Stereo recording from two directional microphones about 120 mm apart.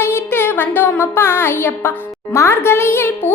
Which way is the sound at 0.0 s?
20° left (ahead or behind).